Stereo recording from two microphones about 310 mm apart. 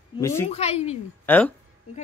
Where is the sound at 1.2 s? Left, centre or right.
Centre.